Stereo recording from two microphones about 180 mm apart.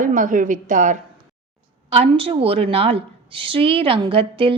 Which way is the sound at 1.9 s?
30° right (ahead or behind).